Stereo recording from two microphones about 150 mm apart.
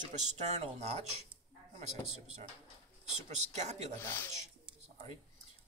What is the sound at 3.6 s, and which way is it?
Speech, 50° right (ahead or behind).